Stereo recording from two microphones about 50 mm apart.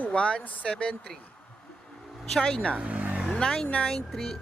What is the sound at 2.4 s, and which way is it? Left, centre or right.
Speech, left.